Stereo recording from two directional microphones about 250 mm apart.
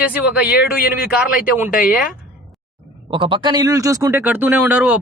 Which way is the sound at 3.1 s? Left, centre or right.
Centre.